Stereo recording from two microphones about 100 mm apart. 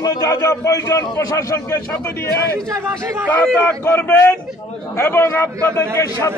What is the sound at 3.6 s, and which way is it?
Speech, 20° left (ahead or behind).